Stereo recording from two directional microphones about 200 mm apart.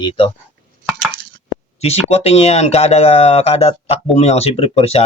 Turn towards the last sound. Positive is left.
turn(degrees=30)  # may be behind; listen again after turning